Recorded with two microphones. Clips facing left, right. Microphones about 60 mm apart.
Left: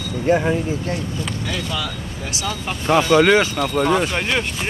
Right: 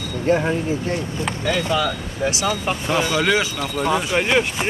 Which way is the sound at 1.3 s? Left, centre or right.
Right.